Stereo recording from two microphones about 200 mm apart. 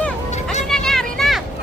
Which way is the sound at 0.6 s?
Centre (ahead or behind).